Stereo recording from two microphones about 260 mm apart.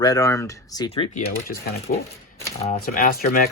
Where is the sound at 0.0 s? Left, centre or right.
Centre.